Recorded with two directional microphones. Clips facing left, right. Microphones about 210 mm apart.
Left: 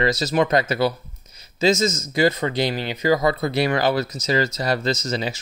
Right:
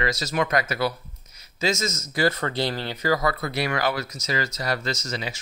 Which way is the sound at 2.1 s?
20° left (ahead or behind).